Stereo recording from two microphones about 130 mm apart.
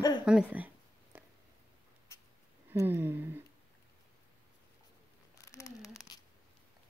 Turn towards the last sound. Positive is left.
turn(degrees=25)  # may be behind; listen again after turning